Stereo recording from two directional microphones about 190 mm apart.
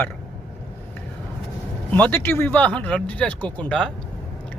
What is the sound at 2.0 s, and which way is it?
Speech, 10° left (ahead or behind).